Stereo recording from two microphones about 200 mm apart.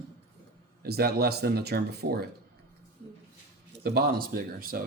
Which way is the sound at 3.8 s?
50° right (ahead or behind).